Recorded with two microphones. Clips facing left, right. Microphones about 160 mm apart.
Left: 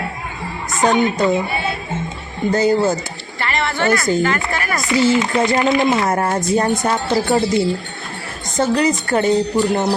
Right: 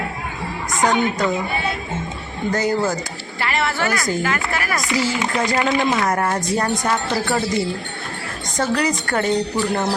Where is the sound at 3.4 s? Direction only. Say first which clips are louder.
Left 1 dB; 5° right (ahead or behind).